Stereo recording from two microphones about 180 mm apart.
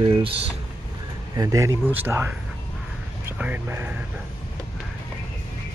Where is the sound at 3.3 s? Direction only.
10° right (ahead or behind).